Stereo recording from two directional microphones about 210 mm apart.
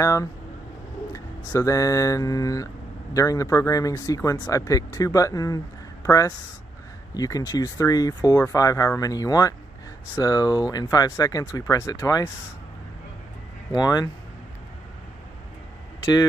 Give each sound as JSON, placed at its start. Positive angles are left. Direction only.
{"t": 0.0, "sound": "speech", "side_deg": 15}
{"t": 1.1, "sound": "mantra", "side_deg": 15}
{"t": 13.7, "sound": "mantra", "side_deg": 20}